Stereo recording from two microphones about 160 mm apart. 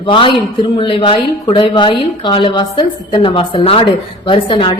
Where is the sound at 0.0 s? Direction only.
30° left (ahead or behind).